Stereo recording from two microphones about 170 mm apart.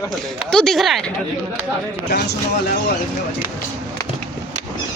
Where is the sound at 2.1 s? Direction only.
70° left (ahead or behind).